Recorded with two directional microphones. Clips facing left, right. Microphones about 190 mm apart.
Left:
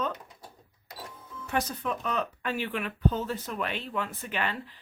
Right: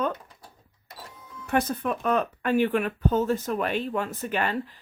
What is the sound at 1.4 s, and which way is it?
Speech, 55° right (ahead or behind).